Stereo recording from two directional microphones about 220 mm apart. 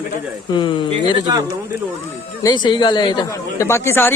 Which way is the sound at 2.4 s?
20° left (ahead or behind).